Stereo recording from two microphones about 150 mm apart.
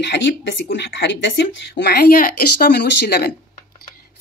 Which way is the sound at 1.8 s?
90° left.